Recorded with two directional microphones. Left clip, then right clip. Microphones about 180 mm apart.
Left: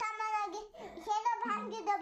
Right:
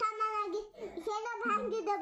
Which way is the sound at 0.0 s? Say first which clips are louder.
Right 2 dB; 25° left (ahead or behind).